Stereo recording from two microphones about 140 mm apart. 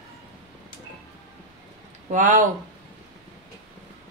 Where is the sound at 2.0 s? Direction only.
65° right (ahead or behind).